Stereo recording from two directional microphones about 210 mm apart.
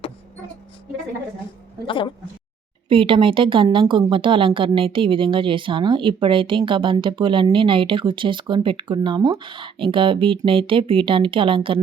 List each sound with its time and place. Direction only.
1.9 s speech: 25° left (ahead or behind)
2.9 s a woman's voice: 25° right (ahead or behind)